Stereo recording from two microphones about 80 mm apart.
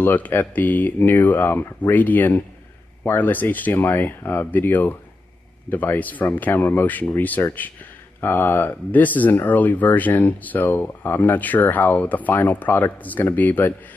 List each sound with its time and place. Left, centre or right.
0.0 s speech: left